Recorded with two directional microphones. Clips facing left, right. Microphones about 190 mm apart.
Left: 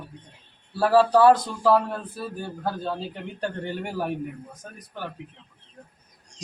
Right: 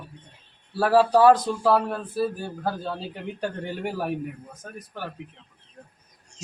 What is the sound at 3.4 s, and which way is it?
Speech, 5° right (ahead or behind).